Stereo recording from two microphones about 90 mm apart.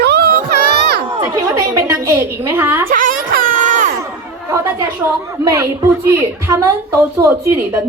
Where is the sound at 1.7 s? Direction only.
30° right (ahead or behind).